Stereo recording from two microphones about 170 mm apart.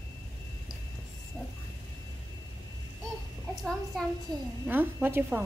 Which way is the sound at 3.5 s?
Centre (ahead or behind).